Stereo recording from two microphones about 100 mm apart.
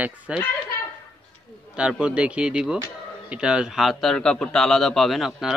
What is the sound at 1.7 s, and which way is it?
A man's voice, 10° right (ahead or behind).